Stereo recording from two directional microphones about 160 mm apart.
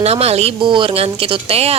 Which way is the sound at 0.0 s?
40° right (ahead or behind).